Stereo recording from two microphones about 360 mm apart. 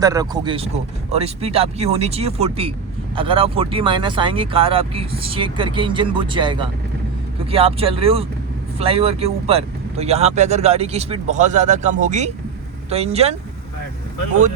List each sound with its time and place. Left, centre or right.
0.0 s speech: centre